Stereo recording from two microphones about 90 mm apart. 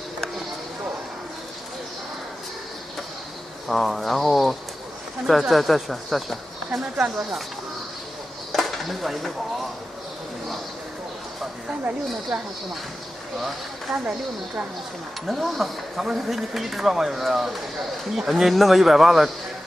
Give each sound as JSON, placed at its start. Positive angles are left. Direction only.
{"t": 3.6, "sound": "speech", "side_deg": 0}
{"t": 8.5, "sound": "a sound", "side_deg": 0}
{"t": 12.3, "sound": "speech", "side_deg": -5}
{"t": 14.0, "sound": "speech", "side_deg": -15}
{"t": 15.2, "sound": "speech", "side_deg": 0}